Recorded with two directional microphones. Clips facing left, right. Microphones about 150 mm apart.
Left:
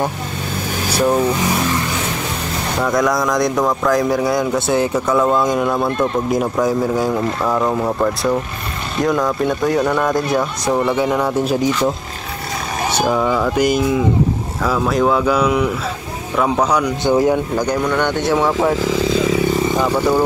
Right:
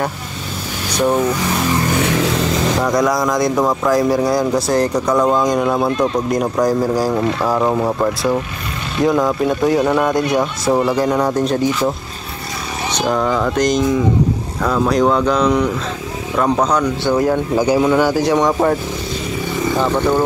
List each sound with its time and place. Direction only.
0.9 s speech: centre (ahead or behind)
2.8 s speech: centre (ahead or behind)
9.0 s speech: centre (ahead or behind)
10.7 s a man's voice: 10° right (ahead or behind)
11.0 s speech: centre (ahead or behind)
12.9 s speech: 5° left (ahead or behind)
17.6 s speech: 5° right (ahead or behind)
18.9 s speech: 90° left
19.7 s speech: 10° left (ahead or behind)